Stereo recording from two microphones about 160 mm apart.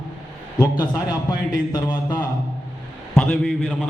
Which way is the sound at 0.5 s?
25° left (ahead or behind).